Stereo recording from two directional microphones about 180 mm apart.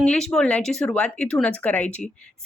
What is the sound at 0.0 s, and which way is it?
A woman's voice, 5° left (ahead or behind).